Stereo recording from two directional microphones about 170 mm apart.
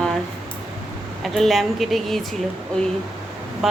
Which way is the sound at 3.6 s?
Centre (ahead or behind).